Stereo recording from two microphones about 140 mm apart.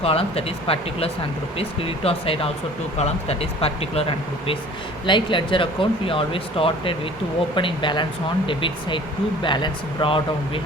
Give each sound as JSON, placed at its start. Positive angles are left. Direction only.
{"t": 0.0, "sound": "speech", "side_deg": 45}